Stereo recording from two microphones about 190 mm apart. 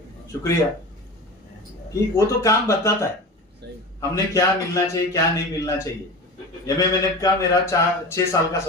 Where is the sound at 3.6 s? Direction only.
60° right (ahead or behind).